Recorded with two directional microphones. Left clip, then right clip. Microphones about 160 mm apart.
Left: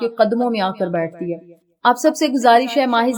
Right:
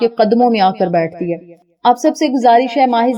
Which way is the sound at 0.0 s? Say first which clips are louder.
Right 5 dB; 30° right (ahead or behind).